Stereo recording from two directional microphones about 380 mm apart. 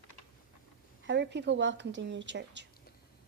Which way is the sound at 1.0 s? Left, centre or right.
Right.